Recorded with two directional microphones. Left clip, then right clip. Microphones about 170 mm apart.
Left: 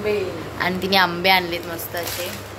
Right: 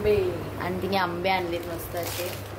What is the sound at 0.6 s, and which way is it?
A woman's voice, centre (ahead or behind).